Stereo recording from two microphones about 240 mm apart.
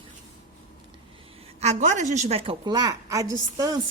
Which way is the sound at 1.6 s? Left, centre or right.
Right.